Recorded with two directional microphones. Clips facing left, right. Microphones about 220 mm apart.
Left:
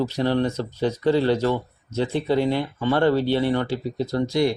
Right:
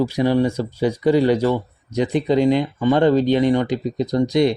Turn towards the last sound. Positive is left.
turn(degrees=-20)  # may be behind; listen again after turning